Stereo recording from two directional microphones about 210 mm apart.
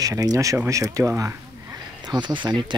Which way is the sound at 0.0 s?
15° right (ahead or behind).